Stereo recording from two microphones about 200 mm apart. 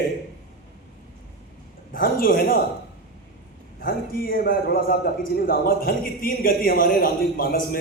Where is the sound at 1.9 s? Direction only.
45° left (ahead or behind).